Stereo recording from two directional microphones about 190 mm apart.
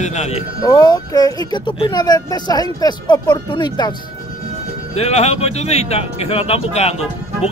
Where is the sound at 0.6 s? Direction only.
20° left (ahead or behind).